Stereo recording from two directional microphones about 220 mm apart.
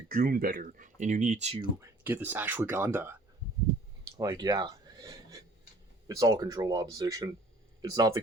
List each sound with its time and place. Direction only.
0.1 s speech: 40° right (ahead or behind)
1.8 s speech: 10° right (ahead or behind)
4.2 s speech: 20° right (ahead or behind)